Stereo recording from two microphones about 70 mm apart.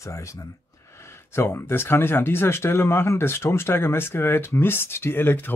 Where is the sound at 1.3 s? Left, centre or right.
Left.